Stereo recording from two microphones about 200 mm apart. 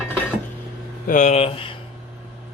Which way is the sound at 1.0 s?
40° left (ahead or behind).